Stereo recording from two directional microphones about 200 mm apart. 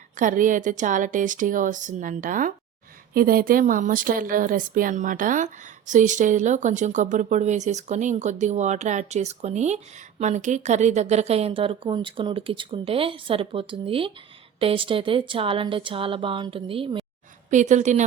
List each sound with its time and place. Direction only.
0.2 s a woman's voice: 40° right (ahead or behind)
17.5 s speech: 35° right (ahead or behind)